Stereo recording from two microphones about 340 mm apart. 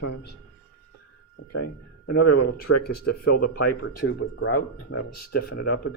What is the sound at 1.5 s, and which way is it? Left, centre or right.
Speech, left.